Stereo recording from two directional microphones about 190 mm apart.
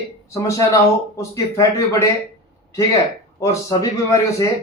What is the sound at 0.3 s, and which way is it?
Speech, 15° left (ahead or behind).